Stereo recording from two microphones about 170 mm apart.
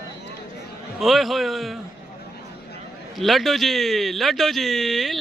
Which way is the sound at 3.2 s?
Centre (ahead or behind).